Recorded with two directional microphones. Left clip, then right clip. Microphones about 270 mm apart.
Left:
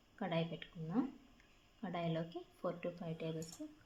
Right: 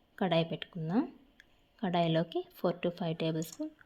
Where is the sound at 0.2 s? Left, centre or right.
Right.